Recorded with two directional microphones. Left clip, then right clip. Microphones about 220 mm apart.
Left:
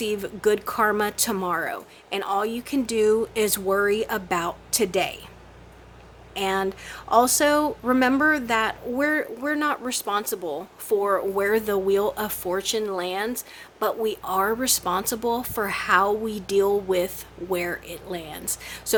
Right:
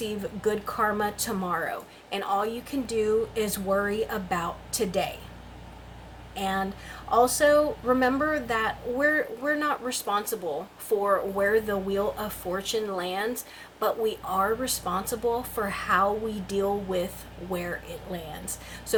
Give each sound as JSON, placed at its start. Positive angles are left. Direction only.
{"t": 0.0, "sound": "speech", "side_deg": 45}
{"t": 6.3, "sound": "speech", "side_deg": 45}